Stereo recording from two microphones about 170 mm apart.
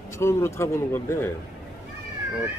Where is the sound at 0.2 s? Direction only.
15° left (ahead or behind).